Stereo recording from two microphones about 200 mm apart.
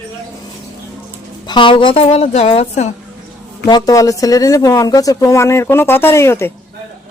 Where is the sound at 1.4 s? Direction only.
25° left (ahead or behind).